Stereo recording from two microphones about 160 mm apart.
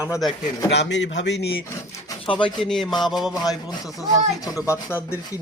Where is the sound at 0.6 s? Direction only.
90° left.